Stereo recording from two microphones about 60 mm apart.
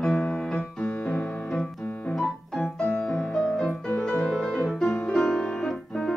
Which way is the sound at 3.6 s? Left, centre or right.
Centre.